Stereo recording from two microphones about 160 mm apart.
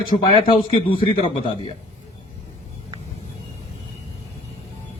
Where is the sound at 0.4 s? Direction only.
35° left (ahead or behind).